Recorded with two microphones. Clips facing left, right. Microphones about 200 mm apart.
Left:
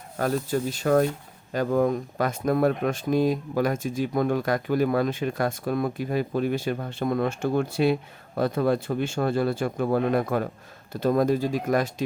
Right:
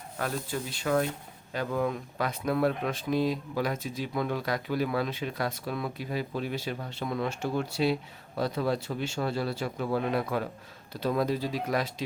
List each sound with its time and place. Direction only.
0.2 s speech: 45° left (ahead or behind)